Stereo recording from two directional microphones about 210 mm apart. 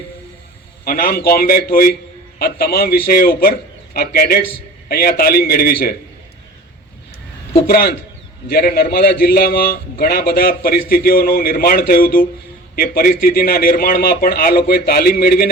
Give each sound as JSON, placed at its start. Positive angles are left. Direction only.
{"t": 0.9, "sound": "a man's voice", "side_deg": 45}
{"t": 7.7, "sound": "a man's voice", "side_deg": 45}